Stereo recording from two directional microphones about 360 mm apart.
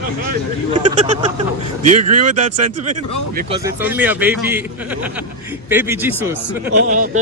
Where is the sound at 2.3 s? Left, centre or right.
Right.